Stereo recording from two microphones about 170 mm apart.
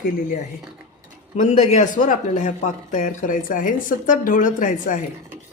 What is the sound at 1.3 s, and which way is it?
A man's voice, 40° left (ahead or behind).